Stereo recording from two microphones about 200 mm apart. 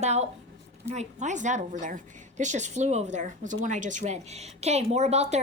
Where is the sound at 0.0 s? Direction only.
35° right (ahead or behind).